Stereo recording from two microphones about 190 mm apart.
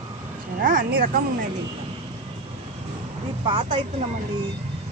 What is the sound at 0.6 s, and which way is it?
Speech, 45° right (ahead or behind).